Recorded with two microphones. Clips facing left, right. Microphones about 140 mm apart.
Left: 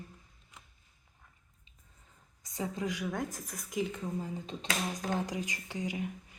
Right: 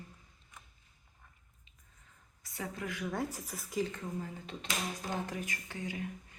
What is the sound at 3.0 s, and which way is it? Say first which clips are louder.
A woman's voice: left 1 dB; 5° right (ahead or behind).